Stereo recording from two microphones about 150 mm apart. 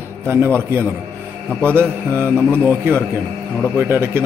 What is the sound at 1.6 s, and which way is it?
Speech, 15° right (ahead or behind).